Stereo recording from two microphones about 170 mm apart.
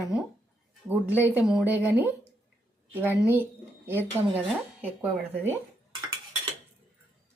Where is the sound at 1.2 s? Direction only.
10° right (ahead or behind).